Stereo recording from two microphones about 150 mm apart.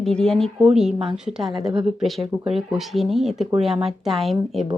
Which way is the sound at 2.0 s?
Centre (ahead or behind).